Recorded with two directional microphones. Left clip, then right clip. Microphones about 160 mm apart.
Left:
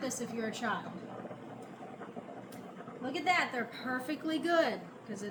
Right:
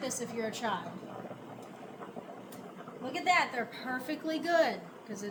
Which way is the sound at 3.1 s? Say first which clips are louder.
Right 2 dB; 25° right (ahead or behind).